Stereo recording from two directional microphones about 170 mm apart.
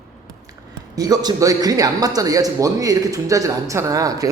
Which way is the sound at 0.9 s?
20° right (ahead or behind).